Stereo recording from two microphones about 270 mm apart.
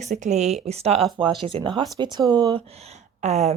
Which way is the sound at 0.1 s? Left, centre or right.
Right.